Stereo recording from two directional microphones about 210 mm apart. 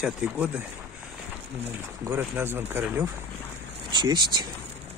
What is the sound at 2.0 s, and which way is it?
Speech, 10° right (ahead or behind).